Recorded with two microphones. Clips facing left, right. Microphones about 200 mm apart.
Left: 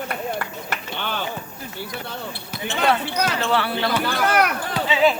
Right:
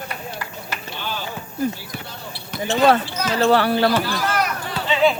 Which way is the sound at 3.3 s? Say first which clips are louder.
Right 11 dB; 40° right (ahead or behind).